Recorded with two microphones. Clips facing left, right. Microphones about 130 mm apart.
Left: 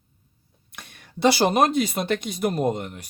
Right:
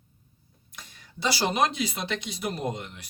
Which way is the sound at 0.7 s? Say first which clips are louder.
Left 3 dB; 65° left (ahead or behind).